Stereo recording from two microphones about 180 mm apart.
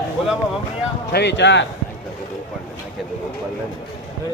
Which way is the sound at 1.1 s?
75° left (ahead or behind).